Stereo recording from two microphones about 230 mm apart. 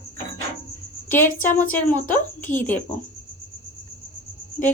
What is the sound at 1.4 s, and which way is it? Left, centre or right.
A woman's voice, centre.